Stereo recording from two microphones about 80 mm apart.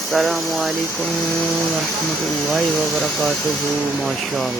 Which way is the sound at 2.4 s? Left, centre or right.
Centre.